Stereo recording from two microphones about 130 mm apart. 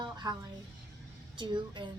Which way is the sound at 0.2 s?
30° right (ahead or behind).